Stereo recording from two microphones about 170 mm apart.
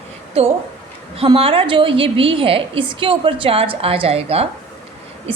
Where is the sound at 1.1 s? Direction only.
35° right (ahead or behind).